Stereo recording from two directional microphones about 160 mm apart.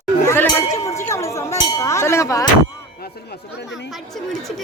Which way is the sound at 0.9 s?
20° left (ahead or behind).